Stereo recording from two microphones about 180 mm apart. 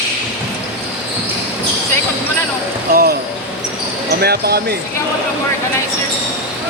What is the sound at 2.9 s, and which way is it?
Speech, 55° right (ahead or behind).